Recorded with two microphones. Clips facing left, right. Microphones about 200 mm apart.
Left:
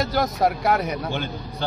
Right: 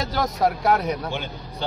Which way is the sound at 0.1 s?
5° left (ahead or behind).